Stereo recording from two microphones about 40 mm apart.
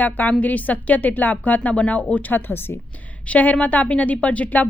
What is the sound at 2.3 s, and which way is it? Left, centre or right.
Speech, left.